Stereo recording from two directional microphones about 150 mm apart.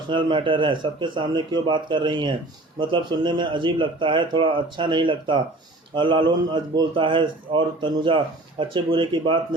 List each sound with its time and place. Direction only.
0.1 s speech: 30° right (ahead or behind)